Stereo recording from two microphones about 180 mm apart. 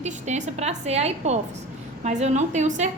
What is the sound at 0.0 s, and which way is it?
A woman's voice, 40° right (ahead or behind).